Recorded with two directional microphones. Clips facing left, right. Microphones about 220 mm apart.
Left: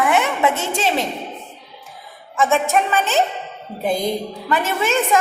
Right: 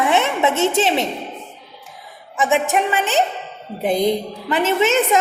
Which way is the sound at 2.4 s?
20° right (ahead or behind).